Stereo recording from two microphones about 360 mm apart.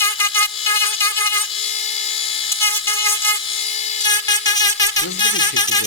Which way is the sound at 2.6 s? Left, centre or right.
Centre.